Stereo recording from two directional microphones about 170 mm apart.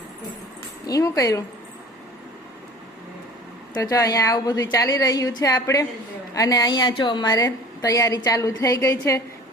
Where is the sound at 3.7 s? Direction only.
20° left (ahead or behind).